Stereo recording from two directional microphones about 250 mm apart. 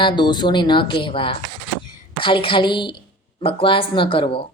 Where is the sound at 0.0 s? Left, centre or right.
Centre.